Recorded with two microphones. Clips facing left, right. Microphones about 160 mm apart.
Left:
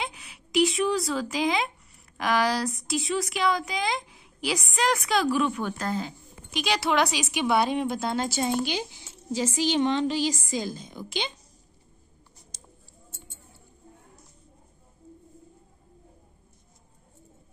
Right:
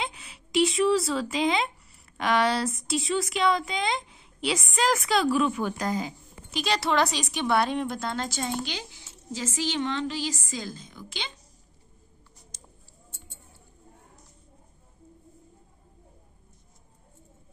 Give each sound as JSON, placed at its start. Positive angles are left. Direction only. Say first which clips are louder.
{"t": 0.0, "sound": "a woman's voice", "louder": "right 1 dB", "side_deg": 0}